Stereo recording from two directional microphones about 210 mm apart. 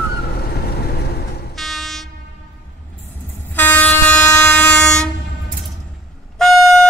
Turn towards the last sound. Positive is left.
turn(degrees=0)  # may be behind; listen again after turning